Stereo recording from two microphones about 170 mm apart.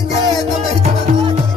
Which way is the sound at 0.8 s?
40° right (ahead or behind).